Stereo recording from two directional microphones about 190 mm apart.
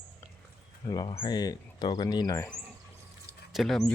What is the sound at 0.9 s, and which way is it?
Speech, 25° left (ahead or behind).